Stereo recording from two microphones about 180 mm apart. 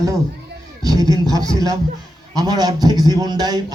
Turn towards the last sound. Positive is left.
turn(degrees=-20)  # may be behind; listen again after turning